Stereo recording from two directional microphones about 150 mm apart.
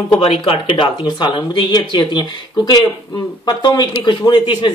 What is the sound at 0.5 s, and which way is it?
Speech, 35° left (ahead or behind).